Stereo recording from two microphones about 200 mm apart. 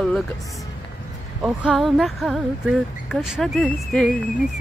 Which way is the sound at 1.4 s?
Centre (ahead or behind).